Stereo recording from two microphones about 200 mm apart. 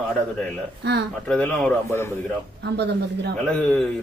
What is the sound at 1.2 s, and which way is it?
Speech, 5° left (ahead or behind).